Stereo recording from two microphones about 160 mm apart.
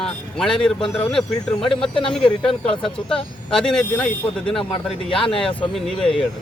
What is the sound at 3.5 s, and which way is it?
Speech, 5° left (ahead or behind).